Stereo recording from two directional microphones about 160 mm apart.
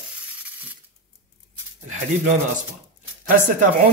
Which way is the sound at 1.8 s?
50° right (ahead or behind).